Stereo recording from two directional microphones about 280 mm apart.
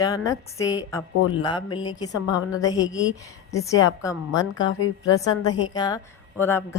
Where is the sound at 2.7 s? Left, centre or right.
Centre.